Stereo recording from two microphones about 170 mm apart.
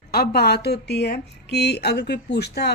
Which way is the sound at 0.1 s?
65° left (ahead or behind).